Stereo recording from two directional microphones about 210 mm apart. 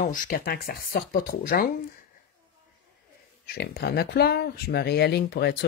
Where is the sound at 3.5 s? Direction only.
50° left (ahead or behind).